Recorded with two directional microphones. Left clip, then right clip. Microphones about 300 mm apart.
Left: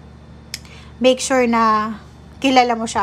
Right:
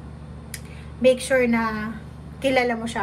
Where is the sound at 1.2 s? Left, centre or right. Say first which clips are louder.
Left 5 dB; centre.